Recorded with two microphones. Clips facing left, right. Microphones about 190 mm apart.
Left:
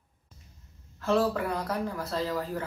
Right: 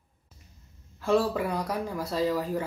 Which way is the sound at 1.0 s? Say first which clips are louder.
Right 1 dB; 10° right (ahead or behind).